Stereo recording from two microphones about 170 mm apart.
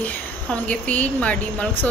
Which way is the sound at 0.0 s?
10° left (ahead or behind).